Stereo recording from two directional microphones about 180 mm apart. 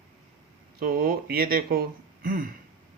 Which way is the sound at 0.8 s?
55° right (ahead or behind).